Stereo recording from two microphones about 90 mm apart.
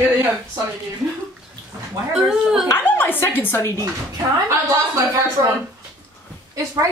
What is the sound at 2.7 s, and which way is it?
Speech, 20° left (ahead or behind).